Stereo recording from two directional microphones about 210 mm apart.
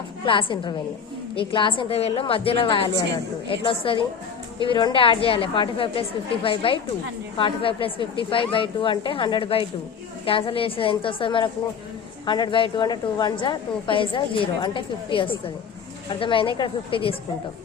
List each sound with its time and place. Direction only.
0.3 s a woman's voice: 25° left (ahead or behind)